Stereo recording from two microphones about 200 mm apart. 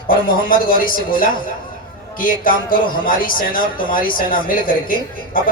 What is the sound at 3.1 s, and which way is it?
Speech, 45° left (ahead or behind).